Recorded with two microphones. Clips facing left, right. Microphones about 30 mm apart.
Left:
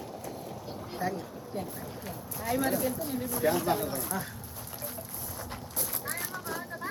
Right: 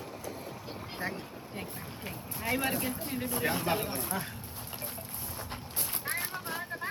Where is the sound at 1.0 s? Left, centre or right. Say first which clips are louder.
Left 4 dB; right.